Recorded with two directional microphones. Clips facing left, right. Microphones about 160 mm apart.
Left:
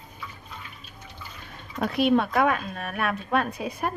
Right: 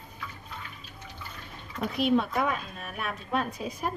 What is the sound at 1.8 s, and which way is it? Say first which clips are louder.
A woman's voice: left 3 dB; 65° left (ahead or behind).